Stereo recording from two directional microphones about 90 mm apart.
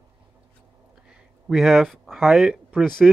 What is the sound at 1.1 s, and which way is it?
Speech, 5° right (ahead or behind).